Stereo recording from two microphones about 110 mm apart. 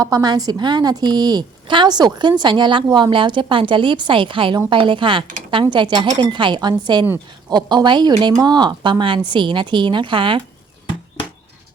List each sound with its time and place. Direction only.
0.0 s a woman's voice: 35° right (ahead or behind); by 10.4 s 50° right (ahead or behind)